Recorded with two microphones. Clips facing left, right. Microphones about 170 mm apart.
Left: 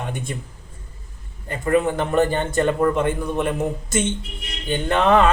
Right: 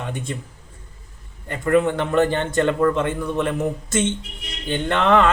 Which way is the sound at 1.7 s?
10° left (ahead or behind).